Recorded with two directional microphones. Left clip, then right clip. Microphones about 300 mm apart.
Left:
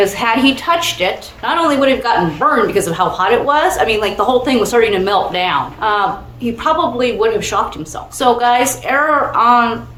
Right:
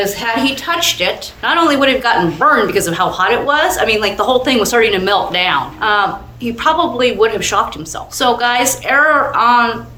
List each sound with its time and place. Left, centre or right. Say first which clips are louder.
0.0 s a woman's voice: left 3 dB; centre